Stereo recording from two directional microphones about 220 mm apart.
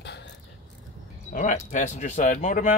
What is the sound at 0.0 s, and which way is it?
Mechanisms, 50° left (ahead or behind).